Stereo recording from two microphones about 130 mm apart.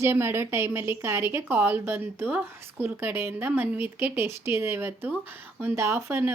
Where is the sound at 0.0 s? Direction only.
20° right (ahead or behind).